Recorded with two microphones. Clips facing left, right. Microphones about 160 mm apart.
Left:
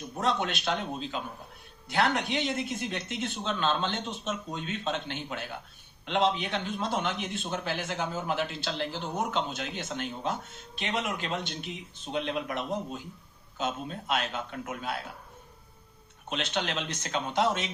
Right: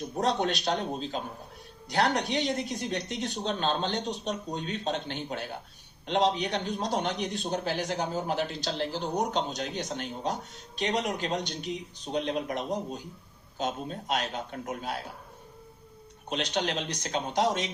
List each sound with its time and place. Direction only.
0.0 s speech: 40° right (ahead or behind)
16.6 s speech: 35° right (ahead or behind)